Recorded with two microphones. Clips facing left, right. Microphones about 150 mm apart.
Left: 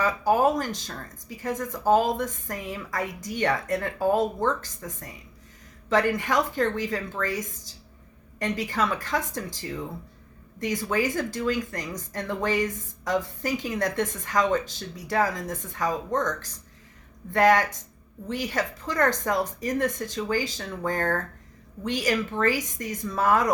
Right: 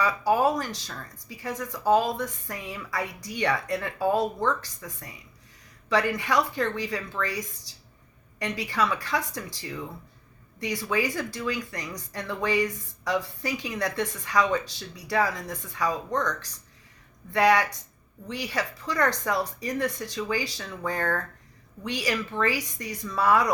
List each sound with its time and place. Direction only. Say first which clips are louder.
0.0 s speech: left 1 dB; 45° left (ahead or behind)